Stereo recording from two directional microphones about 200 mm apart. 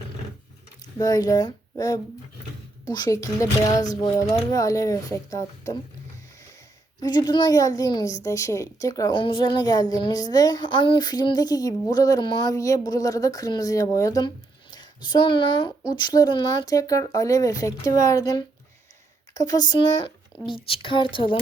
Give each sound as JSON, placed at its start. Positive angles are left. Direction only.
{"t": 0.9, "sound": "speech", "side_deg": 15}
{"t": 7.0, "sound": "a woman's voice", "side_deg": 20}